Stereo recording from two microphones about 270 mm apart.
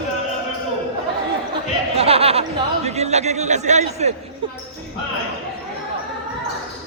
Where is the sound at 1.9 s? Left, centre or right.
Right.